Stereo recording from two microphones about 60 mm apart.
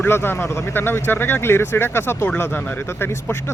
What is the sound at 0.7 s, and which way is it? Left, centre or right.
Speech, left.